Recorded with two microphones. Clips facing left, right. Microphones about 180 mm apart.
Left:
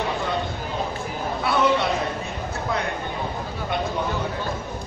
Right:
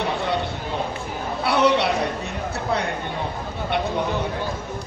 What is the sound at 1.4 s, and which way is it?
Chatter, 75° right (ahead or behind).